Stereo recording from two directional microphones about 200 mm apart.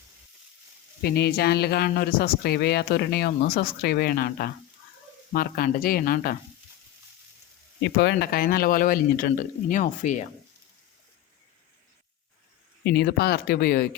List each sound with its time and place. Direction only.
1.0 s speech: 50° left (ahead or behind)
7.8 s speech: 60° left (ahead or behind); by 10.2 s 35° left (ahead or behind)
12.8 s speech: 55° left (ahead or behind)